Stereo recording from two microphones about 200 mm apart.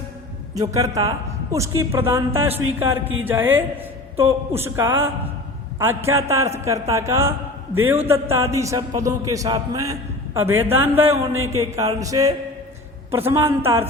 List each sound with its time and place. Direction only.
0.5 s speech: 15° right (ahead or behind)